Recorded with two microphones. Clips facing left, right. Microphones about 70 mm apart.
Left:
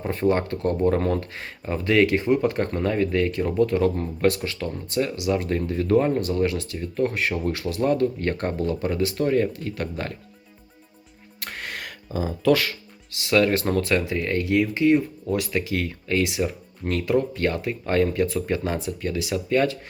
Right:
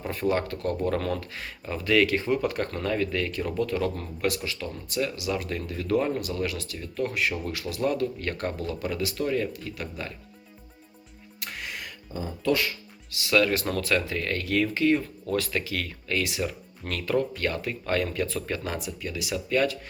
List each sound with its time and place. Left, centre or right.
0.0 s speech: left
9.9 s speech: left
11.3 s music: left
13.2 s speech: left